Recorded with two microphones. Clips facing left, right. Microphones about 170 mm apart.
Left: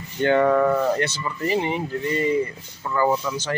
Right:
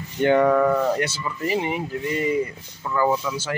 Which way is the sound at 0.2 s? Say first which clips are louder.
Right 1 dB; 15° right (ahead or behind).